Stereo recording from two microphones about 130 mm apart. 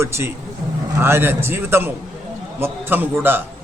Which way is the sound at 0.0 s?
20° right (ahead or behind).